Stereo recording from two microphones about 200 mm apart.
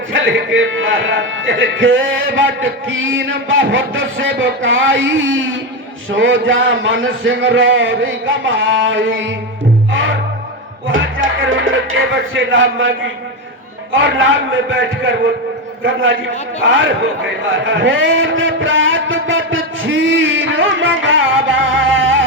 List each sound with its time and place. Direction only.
0.1 s speech: 70° right (ahead or behind)
9.9 s music: 70° right (ahead or behind)
11.3 s speech: 70° right (ahead or behind)
13.9 s speech: 70° right (ahead or behind)
17.5 s a sound: 70° right (ahead or behind)